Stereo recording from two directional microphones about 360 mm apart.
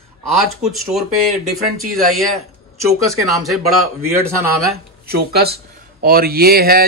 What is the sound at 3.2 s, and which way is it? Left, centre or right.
Speech, centre.